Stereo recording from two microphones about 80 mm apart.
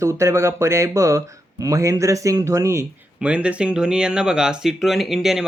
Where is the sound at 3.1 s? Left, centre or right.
Centre.